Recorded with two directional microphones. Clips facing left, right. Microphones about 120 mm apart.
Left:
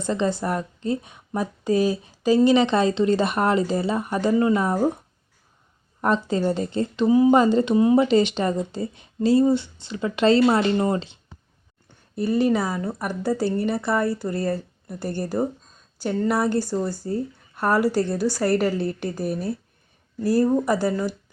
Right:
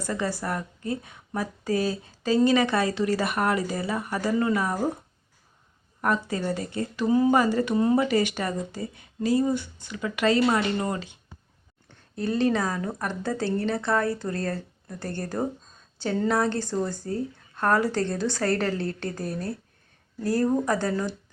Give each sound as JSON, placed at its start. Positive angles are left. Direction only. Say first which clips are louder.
{"t": 0.0, "sound": "a woman's voice", "louder": "left 5 dB", "side_deg": 25}
{"t": 6.0, "sound": "a woman's voice", "louder": "left 4 dB", "side_deg": 25}
{"t": 12.1, "sound": "speech", "louder": "left 3 dB", "side_deg": 10}